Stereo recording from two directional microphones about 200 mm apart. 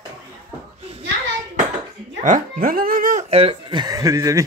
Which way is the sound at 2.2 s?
40° right (ahead or behind).